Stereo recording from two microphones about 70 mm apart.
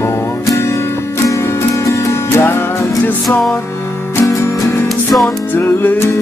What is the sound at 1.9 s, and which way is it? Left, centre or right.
Music, left.